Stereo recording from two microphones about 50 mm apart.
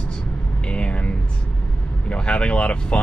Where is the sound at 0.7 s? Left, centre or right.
Left.